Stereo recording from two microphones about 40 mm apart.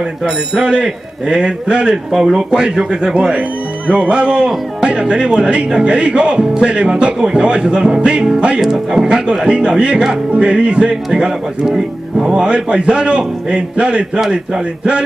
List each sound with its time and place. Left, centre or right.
0.6 s speech: right
2.1 s music: centre
2.5 s speech: centre
8.5 s music: centre
9.5 s speech: right
11.1 s speech: centre